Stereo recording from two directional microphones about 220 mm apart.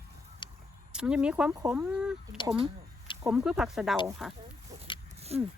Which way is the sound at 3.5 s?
Centre (ahead or behind).